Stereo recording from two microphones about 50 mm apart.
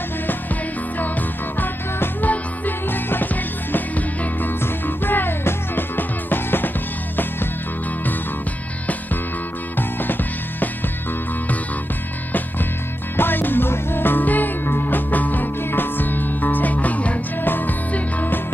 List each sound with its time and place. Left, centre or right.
1.6 s music: left
4.8 s music: left
13.1 s music: left